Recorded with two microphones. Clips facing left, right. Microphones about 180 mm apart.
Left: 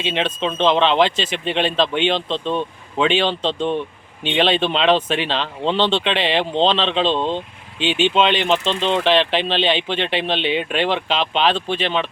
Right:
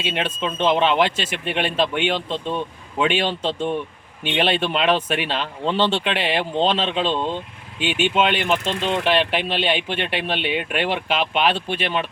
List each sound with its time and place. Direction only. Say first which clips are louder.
0.0 s speech: left 3 dB; 10° right (ahead or behind)
7.1 s speech: left 3 dB; 20° left (ahead or behind)
7.8 s speech: left 3 dB; 10° right (ahead or behind)
8.4 s speech: left 3 dB; 25° left (ahead or behind)
9.0 s speech: left 2 dB; 10° right (ahead or behind)